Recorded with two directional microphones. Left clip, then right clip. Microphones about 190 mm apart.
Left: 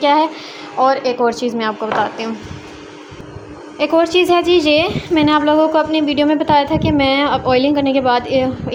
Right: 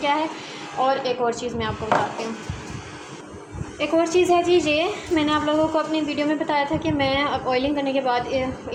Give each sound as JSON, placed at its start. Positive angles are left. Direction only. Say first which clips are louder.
{"t": 0.0, "sound": "a woman's voice", "louder": "left 9 dB", "side_deg": 55}
{"t": 3.8, "sound": "a woman's voice", "louder": "left 6 dB", "side_deg": 45}